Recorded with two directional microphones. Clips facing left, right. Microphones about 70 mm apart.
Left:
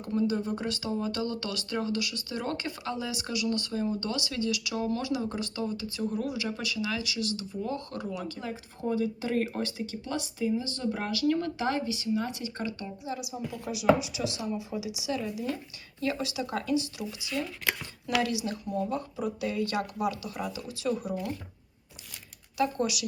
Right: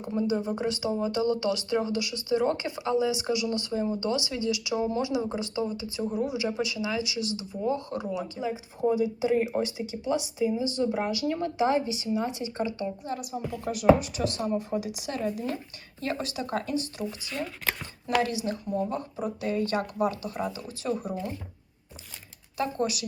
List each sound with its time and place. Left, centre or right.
0.0 s speech: centre
13.1 s speech: right
17.3 s speech: centre
18.2 s speech: right
22.5 s speech: right